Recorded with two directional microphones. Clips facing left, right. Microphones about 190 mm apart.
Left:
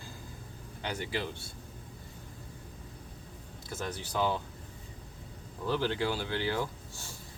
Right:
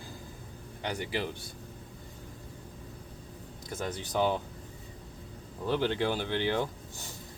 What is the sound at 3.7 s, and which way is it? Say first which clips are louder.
Speech: right 3 dB; 15° right (ahead or behind).